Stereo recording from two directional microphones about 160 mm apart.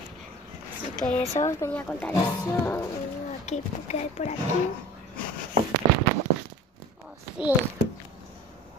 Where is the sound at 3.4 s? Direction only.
45° left (ahead or behind).